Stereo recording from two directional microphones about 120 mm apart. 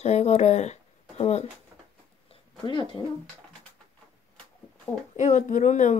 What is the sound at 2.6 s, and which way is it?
Speech, 40° left (ahead or behind).